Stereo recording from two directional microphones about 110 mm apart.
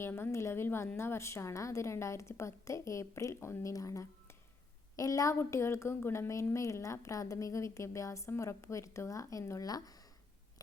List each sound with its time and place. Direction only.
0.0 s a woman's voice: 20° left (ahead or behind)